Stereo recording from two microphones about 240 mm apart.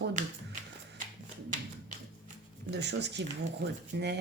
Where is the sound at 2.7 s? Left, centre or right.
Right.